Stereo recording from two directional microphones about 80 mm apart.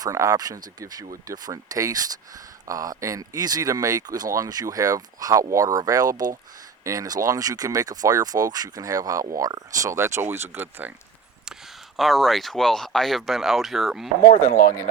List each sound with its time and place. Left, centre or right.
0.0 s speech: right
11.9 s speech: centre